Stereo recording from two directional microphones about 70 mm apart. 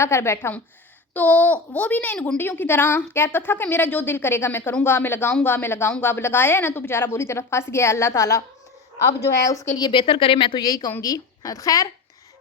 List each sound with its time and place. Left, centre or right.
0.0 s a woman's voice: left
1.1 s a child's voice: left
10.6 s a woman's voice: left
11.0 s a woman's voice: left